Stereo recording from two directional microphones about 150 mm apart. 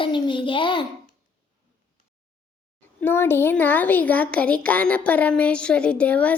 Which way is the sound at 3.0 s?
15° left (ahead or behind).